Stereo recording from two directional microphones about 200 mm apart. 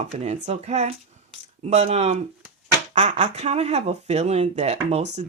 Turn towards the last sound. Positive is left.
turn(degrees=-35)  # may be behind; listen again after turning